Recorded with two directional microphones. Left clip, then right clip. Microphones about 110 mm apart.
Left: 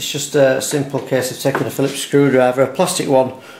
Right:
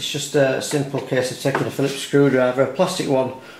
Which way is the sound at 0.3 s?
35° left (ahead or behind).